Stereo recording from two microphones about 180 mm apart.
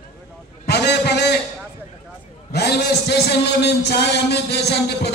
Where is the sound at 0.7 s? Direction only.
65° left (ahead or behind).